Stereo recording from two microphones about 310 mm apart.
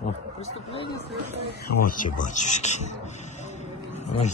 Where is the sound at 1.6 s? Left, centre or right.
Left.